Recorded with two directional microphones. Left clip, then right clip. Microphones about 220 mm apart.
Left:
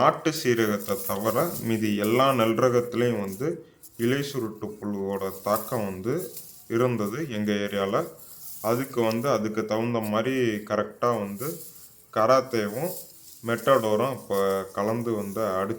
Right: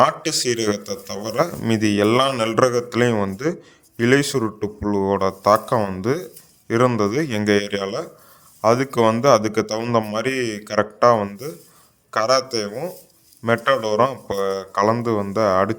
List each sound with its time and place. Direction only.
0.0 s a man's voice: 35° right (ahead or behind)